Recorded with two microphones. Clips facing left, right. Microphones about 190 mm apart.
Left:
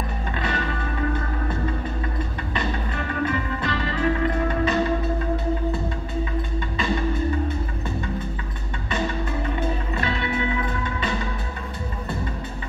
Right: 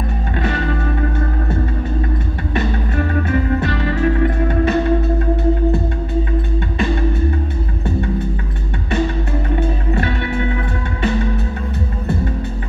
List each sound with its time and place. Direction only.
3.3 s music: 50° right (ahead or behind)